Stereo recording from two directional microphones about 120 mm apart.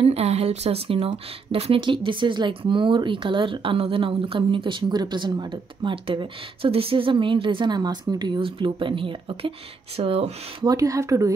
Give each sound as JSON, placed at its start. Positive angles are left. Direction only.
{"t": 0.0, "sound": "speech", "side_deg": -60}
{"t": 10.6, "sound": "speech", "side_deg": -30}